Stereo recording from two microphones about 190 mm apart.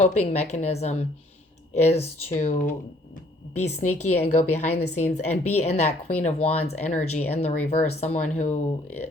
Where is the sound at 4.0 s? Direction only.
35° left (ahead or behind).